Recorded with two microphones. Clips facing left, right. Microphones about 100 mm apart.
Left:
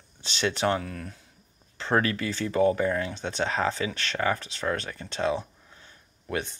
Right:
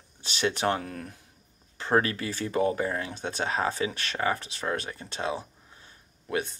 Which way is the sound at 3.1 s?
45° right (ahead or behind).